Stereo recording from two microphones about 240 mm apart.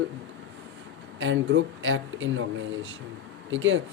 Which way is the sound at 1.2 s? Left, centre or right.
Right.